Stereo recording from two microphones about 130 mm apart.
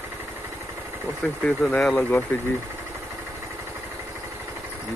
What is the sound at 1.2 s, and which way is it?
Speech, 5° left (ahead or behind).